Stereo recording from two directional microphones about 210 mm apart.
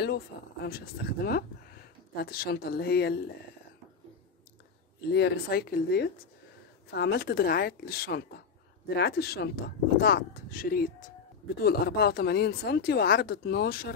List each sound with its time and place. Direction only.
0.7 s speech: 45° left (ahead or behind)
5.1 s speech: 50° left (ahead or behind)